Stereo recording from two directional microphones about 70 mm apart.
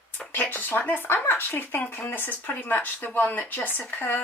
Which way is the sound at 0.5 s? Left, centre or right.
Left.